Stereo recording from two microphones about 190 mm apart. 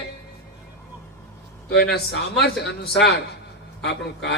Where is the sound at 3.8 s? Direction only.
60° left (ahead or behind).